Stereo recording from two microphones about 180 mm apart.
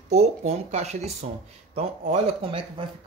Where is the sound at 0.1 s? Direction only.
35° right (ahead or behind).